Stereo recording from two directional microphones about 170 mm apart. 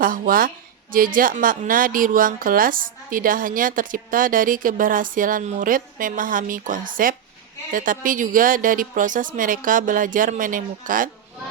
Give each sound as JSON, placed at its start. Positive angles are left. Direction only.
{"t": 0.0, "sound": "speech", "side_deg": -55}